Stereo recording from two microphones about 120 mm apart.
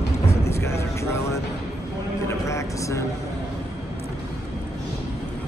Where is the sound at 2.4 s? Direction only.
25° left (ahead or behind).